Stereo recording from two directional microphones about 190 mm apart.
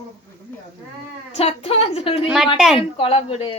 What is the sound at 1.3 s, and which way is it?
A woman's voice, 35° left (ahead or behind).